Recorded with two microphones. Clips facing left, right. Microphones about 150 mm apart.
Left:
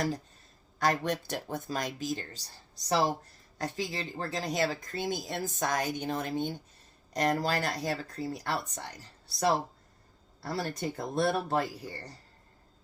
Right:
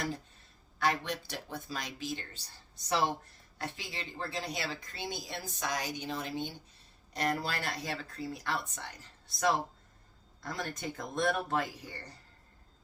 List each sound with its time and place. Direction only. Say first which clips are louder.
0.8 s speech: left 3 dB; 45° left (ahead or behind)